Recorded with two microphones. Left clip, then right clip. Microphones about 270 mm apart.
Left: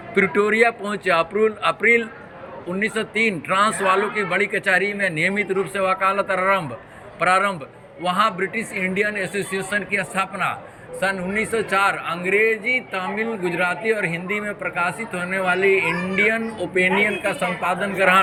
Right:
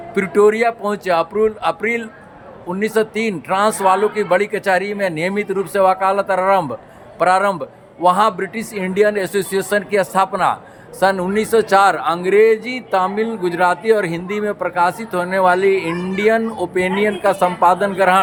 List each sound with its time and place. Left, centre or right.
0.1 s a man's voice: centre